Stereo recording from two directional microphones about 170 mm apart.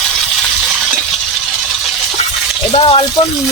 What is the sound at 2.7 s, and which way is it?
Speech, 35° left (ahead or behind).